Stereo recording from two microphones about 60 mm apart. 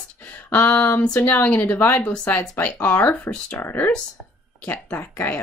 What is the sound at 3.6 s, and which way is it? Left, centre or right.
Speech, left.